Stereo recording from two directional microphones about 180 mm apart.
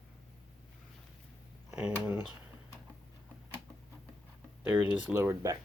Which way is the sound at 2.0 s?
10° right (ahead or behind).